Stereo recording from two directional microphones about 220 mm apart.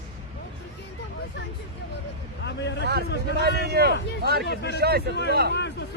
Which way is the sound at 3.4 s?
45° right (ahead or behind).